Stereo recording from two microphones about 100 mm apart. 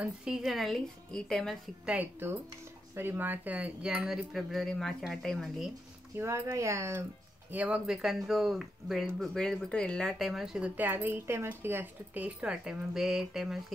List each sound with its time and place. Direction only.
0.0 s speech: 5° right (ahead or behind)
1.9 s speech: 20° right (ahead or behind); by 5.7 s 5° left (ahead or behind)
6.1 s speech: 25° right (ahead or behind)
7.5 s speech: 10° right (ahead or behind)
10.8 s speech: 20° right (ahead or behind); by 13.6 s 5° right (ahead or behind)